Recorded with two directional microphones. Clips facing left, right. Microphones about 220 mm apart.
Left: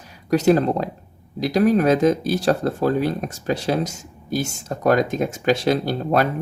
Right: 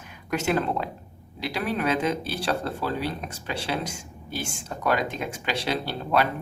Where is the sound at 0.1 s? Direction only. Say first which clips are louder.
Left 9 dB; 35° left (ahead or behind).